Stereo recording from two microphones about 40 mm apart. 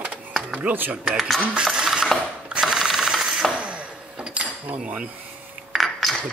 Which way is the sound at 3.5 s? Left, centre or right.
Right.